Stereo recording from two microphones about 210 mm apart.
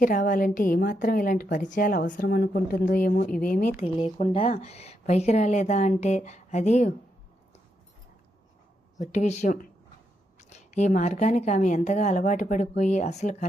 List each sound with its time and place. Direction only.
0.0 s a woman's voice: 40° left (ahead or behind)
3.8 s a woman's voice: 25° left (ahead or behind)
9.0 s a woman's voice: 35° left (ahead or behind)